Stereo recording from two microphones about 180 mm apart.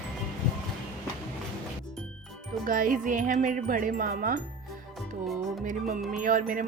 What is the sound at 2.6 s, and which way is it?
Music, 50° right (ahead or behind).